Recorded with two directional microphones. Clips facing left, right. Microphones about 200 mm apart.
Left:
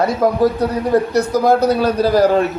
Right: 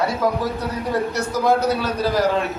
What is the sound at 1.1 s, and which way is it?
Speech, 35° left (ahead or behind).